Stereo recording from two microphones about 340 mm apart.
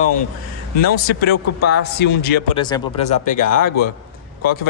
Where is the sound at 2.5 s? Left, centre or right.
Centre.